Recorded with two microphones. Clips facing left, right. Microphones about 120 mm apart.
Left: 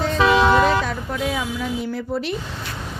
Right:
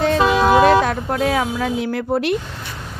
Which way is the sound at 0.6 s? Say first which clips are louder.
Right 6 dB; 60° right (ahead or behind).